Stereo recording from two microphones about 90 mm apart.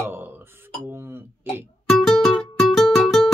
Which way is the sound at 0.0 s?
25° right (ahead or behind).